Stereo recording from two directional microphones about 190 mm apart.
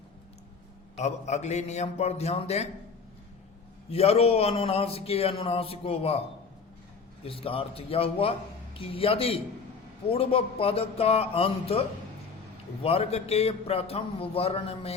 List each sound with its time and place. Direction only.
0.9 s a man's voice: 35° left (ahead or behind)
3.8 s a man's voice: 35° left (ahead or behind)
7.3 s a man's voice: 30° left (ahead or behind)